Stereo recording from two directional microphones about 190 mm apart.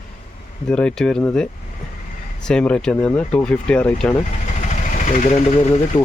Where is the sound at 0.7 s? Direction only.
5° left (ahead or behind).